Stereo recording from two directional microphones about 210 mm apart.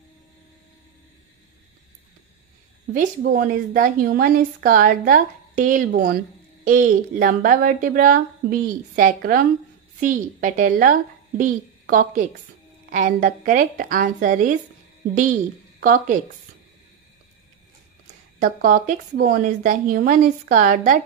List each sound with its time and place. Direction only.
2.9 s a woman's voice: 40° right (ahead or behind)
15.8 s a woman's voice: 40° right (ahead or behind)
18.4 s a woman's voice: 40° right (ahead or behind)